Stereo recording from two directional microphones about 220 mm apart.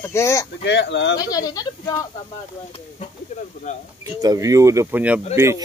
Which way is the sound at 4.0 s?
15° right (ahead or behind).